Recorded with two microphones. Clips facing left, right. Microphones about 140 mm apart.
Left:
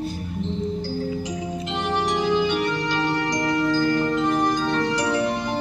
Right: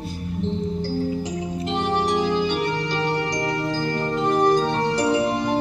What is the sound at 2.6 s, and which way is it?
Music, 30° right (ahead or behind).